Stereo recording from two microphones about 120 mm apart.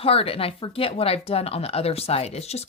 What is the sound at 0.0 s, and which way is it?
Speech, 55° left (ahead or behind).